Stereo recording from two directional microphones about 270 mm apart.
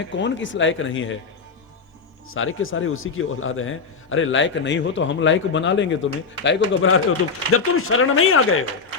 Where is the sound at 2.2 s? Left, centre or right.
Left.